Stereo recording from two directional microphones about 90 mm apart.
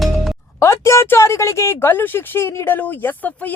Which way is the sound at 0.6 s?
30° left (ahead or behind).